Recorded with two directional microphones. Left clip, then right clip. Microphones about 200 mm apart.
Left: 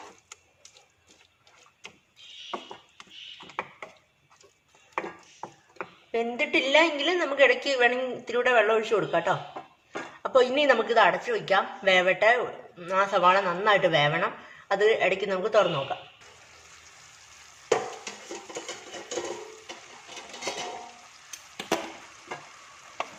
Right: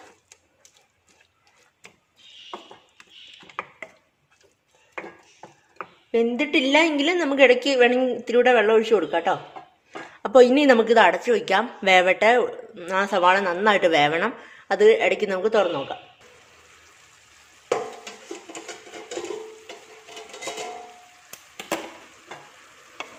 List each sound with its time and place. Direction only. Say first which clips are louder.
6.1 s a woman's voice: right 5 dB; 50° right (ahead or behind)